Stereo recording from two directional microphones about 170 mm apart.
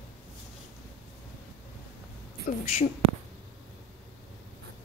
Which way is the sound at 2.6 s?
40° left (ahead or behind).